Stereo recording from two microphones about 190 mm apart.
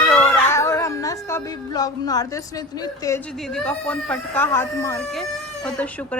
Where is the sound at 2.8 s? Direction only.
20° left (ahead or behind).